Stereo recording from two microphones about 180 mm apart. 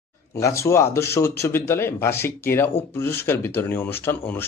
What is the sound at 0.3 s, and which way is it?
A man's voice, 15° left (ahead or behind).